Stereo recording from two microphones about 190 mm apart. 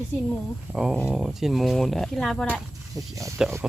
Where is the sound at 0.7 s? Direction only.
5° right (ahead or behind).